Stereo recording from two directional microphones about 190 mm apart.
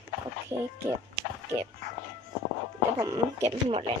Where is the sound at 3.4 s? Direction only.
30° right (ahead or behind).